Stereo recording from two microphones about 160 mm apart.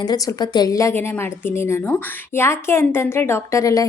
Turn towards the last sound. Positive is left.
turn(degrees=20)  # may be behind; listen again after turning